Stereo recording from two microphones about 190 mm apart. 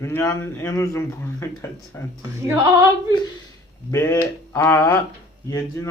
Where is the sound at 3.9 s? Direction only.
15° left (ahead or behind).